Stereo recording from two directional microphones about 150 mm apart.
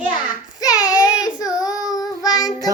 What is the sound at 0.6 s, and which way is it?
Child singing, 25° left (ahead or behind).